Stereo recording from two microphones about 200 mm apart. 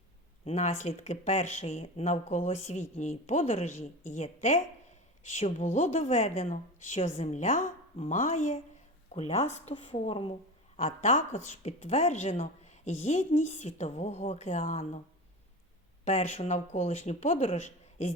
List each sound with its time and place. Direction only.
0.4 s speech: 35° left (ahead or behind)
10.8 s speech: 35° left (ahead or behind)
16.0 s speech: 35° left (ahead or behind)